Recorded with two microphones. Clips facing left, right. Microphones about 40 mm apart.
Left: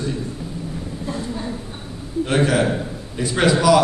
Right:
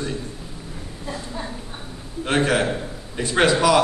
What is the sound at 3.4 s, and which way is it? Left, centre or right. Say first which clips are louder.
Speech: left 2 dB; right.